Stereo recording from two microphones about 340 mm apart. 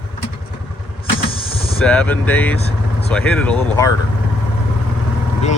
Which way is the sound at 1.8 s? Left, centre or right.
Centre.